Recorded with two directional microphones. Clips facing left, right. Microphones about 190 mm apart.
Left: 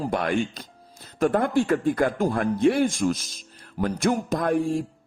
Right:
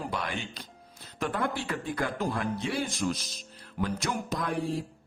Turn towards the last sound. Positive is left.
turn(degrees=50)  # may be behind; listen again after turning